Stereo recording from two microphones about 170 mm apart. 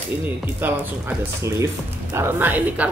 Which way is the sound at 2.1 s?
15° right (ahead or behind).